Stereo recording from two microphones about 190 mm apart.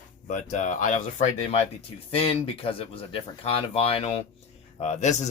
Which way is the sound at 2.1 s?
30° left (ahead or behind).